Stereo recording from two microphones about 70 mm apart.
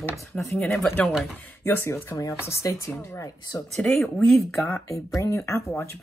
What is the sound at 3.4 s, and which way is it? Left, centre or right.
Speech, left.